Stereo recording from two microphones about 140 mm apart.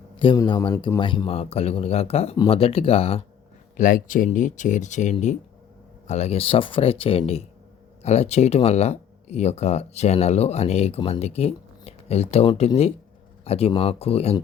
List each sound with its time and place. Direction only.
0.3 s speech: 30° left (ahead or behind)
3.8 s speech: 70° left (ahead or behind); by 14.3 s 45° left (ahead or behind)